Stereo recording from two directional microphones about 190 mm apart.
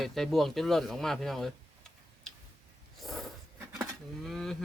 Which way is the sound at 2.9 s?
Centre (ahead or behind).